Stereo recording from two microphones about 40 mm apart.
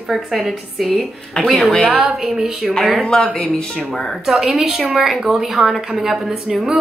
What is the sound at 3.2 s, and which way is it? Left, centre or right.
Speech, centre.